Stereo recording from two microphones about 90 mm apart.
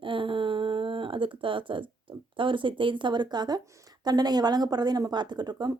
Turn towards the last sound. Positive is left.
turn(degrees=-55)  # may be behind; listen again after turning